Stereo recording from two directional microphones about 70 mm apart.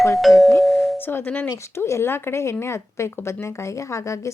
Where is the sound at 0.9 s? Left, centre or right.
Left.